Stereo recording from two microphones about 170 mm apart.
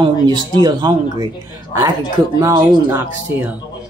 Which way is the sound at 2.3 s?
20° right (ahead or behind).